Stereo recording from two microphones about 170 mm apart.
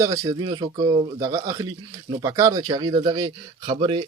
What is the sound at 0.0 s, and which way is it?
Speech, 20° right (ahead or behind).